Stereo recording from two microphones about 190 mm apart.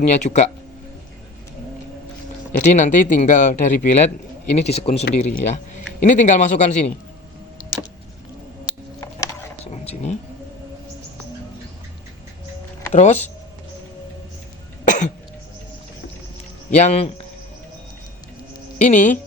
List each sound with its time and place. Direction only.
0.0 s speech: 35° left (ahead or behind)
2.5 s speech: 40° left (ahead or behind)
9.0 s a sound: 15° left (ahead or behind)
9.7 s vehicle: 35° left (ahead or behind)
12.9 s speech: 35° left (ahead or behind)
14.8 s cough: 40° left (ahead or behind)
16.7 s speech: 35° left (ahead or behind)
18.8 s speech: 40° left (ahead or behind)